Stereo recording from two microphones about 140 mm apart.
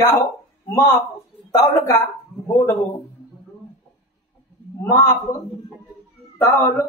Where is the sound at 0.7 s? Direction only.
25° left (ahead or behind).